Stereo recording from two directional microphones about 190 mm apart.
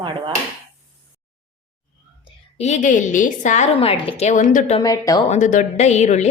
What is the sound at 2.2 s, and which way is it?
A woman's voice, 35° left (ahead or behind).